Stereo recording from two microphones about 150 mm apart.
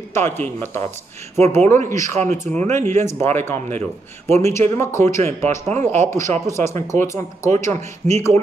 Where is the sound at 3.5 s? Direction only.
45° right (ahead or behind).